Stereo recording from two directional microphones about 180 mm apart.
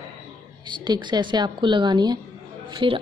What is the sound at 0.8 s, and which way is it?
A woman's voice, 25° right (ahead or behind).